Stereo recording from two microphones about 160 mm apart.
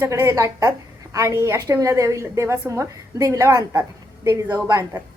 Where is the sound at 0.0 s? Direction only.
20° right (ahead or behind).